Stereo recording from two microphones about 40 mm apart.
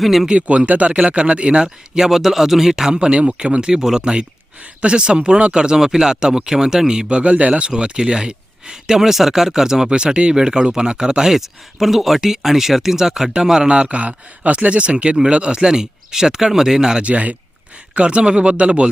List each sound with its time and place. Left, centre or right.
0.0 s speech: centre
0.3 s speech: right
2.0 s speech: centre
7.2 s speech: right
7.7 s speech: right
13.8 s speech: right; by 17.0 s centre
17.0 s speech: right